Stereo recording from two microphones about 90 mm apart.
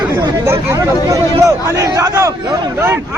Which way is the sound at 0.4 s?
30° right (ahead or behind).